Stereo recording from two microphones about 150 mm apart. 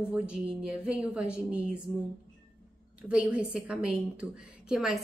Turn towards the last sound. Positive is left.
turn(degrees=-5)  # may be behind; listen again after turning